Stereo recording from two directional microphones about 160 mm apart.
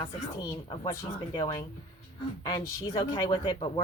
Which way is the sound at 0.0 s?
20° left (ahead or behind).